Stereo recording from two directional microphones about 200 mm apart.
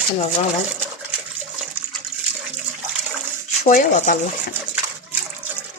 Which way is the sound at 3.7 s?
40° left (ahead or behind).